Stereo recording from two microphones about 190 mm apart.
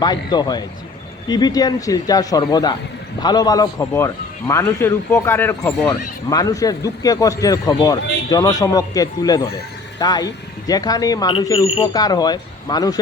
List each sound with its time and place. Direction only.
0.0 s a man's voice: 20° left (ahead or behind)